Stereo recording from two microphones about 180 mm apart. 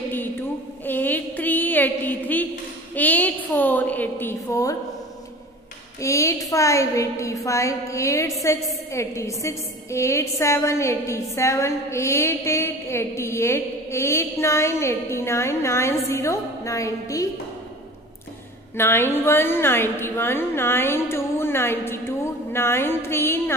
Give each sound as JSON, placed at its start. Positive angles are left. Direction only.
{"t": 0.1, "sound": "a sound", "side_deg": 10}
{"t": 2.9, "sound": "a woman's voice", "side_deg": 10}
{"t": 5.9, "sound": "a woman's voice", "side_deg": 15}
{"t": 18.8, "sound": "a woman's voice", "side_deg": 15}